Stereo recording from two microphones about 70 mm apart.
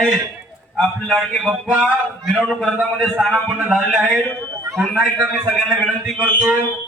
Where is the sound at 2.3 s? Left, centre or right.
Centre.